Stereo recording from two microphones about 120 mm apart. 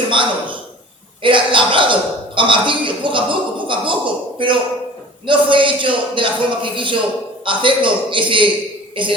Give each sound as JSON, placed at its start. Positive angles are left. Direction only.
{"t": 0.1, "sound": "a man's voice", "side_deg": -45}